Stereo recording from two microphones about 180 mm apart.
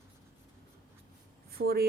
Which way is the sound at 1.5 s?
60° right (ahead or behind).